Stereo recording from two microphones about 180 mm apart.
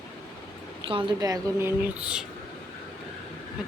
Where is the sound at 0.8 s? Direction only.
30° right (ahead or behind); by 2.2 s 5° right (ahead or behind).